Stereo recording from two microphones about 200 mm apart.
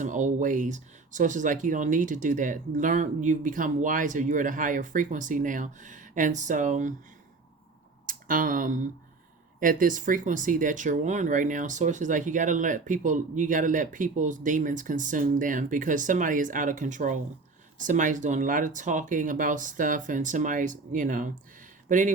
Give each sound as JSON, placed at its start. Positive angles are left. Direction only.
{"t": 0.0, "sound": "speech", "side_deg": -40}
{"t": 8.0, "sound": "speech", "side_deg": -45}